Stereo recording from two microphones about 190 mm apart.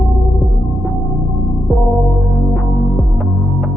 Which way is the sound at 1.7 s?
Centre (ahead or behind).